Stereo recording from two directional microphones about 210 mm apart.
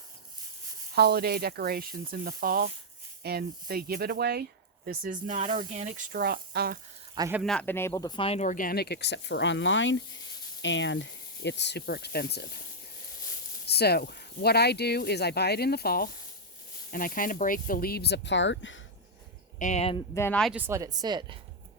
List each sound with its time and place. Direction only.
0.9 s speech: 50° right (ahead or behind)
4.9 s speech: 40° right (ahead or behind)
6.1 s speech: 45° right (ahead or behind)
7.2 s speech: 10° right (ahead or behind)
7.4 s speech: 5° left (ahead or behind); by 12.4 s 50° left (ahead or behind)
13.7 s speech: 50° left (ahead or behind)
19.5 s speech: 35° left (ahead or behind)
20.1 s speech: 10° left (ahead or behind)
20.5 s speech: 10° right (ahead or behind)